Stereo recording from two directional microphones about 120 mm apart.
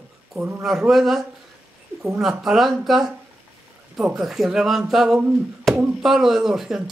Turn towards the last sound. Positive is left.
turn(degrees=-5)  # may be behind; listen again after turning